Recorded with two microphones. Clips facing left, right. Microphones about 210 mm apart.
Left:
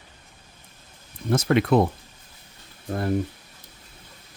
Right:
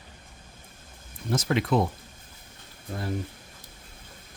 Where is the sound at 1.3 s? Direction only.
55° left (ahead or behind).